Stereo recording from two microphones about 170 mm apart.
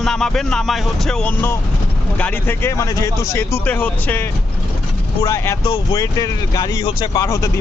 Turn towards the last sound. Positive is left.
turn(degrees=20)  # may be behind; listen again after turning